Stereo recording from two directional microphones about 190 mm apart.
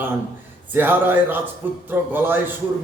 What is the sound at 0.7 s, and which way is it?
Speech, 10° right (ahead or behind).